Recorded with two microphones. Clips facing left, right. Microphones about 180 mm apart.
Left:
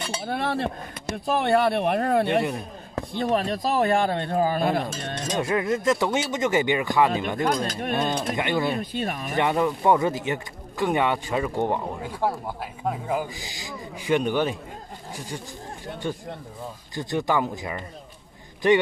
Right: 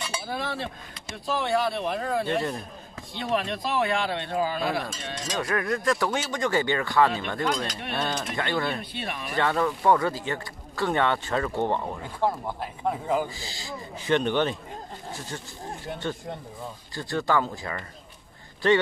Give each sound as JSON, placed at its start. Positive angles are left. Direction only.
{"t": 0.2, "sound": "speech", "side_deg": 60}
{"t": 3.2, "sound": "speech", "side_deg": 40}
{"t": 5.4, "sound": "speech", "side_deg": 20}
{"t": 7.6, "sound": "speech", "side_deg": 50}
{"t": 7.9, "sound": "speech", "side_deg": 15}
{"t": 8.9, "sound": "speech", "side_deg": 45}
{"t": 9.3, "sound": "speech", "side_deg": 15}